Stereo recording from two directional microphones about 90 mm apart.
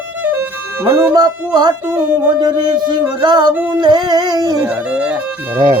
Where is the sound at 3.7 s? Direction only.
50° right (ahead or behind).